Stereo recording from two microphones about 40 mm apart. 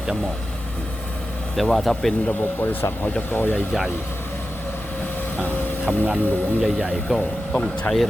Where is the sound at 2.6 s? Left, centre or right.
Left.